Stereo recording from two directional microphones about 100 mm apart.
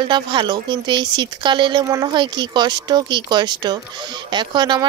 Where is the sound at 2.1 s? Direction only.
50° right (ahead or behind).